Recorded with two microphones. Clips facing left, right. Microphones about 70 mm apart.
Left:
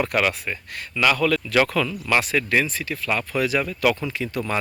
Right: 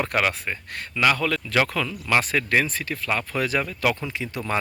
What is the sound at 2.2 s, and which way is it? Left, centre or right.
Speech, right.